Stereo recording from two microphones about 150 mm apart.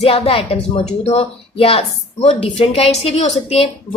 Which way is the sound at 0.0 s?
40° left (ahead or behind).